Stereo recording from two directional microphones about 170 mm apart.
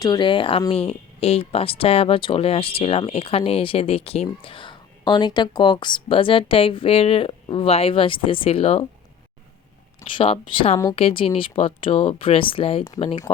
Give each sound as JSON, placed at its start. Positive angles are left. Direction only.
{"t": 0.0, "sound": "speech", "side_deg": 25}
{"t": 10.0, "sound": "speech", "side_deg": 35}